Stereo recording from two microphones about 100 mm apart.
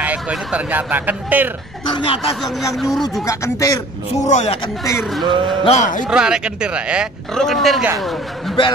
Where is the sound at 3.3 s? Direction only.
30° left (ahead or behind).